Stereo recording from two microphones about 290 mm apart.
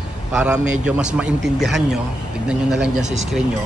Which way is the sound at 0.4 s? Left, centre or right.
Centre.